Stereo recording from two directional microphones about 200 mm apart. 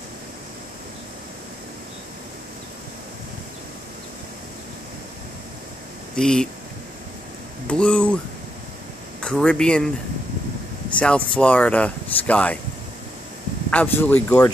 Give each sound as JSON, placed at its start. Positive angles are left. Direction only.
{"t": 6.1, "sound": "speech", "side_deg": 5}
{"t": 7.6, "sound": "speech", "side_deg": 5}
{"t": 9.2, "sound": "speech", "side_deg": 5}
{"t": 11.0, "sound": "speech", "side_deg": 5}
{"t": 13.7, "sound": "speech", "side_deg": 5}